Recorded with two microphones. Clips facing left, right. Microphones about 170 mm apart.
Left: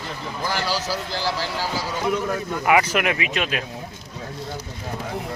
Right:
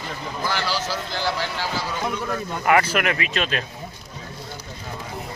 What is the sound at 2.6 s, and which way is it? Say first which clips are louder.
Speech: even; 15° left (ahead or behind).